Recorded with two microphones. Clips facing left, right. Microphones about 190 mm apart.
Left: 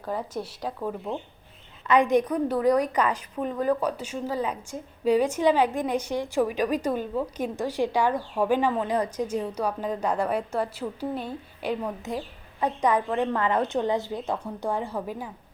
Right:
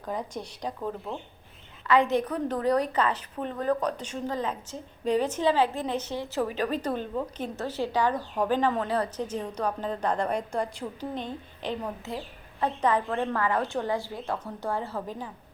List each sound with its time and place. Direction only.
0.0 s speech: 5° left (ahead or behind)
1.9 s a woman's voice: 15° left (ahead or behind)